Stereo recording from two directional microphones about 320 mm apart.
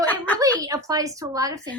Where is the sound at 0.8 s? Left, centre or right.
Centre.